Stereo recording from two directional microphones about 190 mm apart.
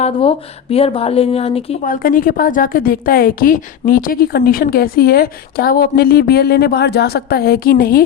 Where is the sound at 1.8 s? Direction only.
45° left (ahead or behind).